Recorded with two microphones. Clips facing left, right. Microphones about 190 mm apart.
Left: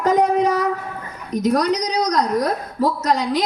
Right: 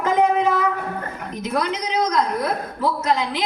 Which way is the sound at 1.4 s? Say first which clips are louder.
Left 6 dB; 40° left (ahead or behind).